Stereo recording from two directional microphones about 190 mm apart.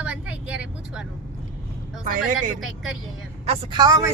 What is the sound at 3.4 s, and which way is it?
Speech, 30° right (ahead or behind).